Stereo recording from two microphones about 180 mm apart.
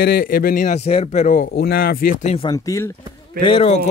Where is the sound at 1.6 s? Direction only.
60° left (ahead or behind).